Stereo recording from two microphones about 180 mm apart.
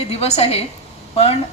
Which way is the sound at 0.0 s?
35° left (ahead or behind).